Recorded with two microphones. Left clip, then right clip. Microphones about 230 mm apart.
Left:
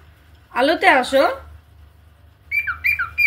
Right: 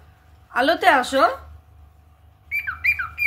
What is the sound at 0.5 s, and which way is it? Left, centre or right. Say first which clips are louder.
Speech: left 2 dB; right.